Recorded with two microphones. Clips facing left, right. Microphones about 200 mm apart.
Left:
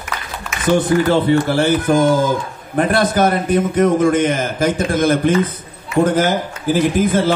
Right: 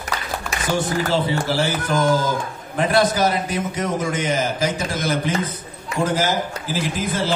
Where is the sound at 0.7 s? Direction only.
55° left (ahead or behind).